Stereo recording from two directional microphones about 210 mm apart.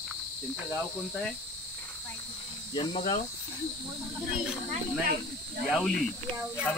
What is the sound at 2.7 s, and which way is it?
Speech, 25° left (ahead or behind).